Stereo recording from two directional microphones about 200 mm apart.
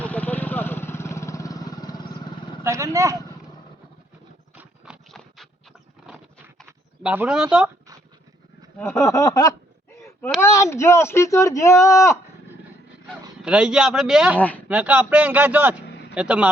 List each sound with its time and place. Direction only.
0.0 s vehicle: 5° left (ahead or behind)
2.6 s a man's voice: 15° right (ahead or behind)
4.5 s clip-clop: centre (ahead or behind)
6.7 s a sound: 10° right (ahead or behind)
8.8 s speech: 15° left (ahead or behind)
13.4 s a man's voice: 5° right (ahead or behind)
14.3 s speech: 10° left (ahead or behind)
14.7 s a man's voice: 10° right (ahead or behind)
15.9 s a sound: 55° left (ahead or behind)
16.1 s a man's voice: 5° right (ahead or behind)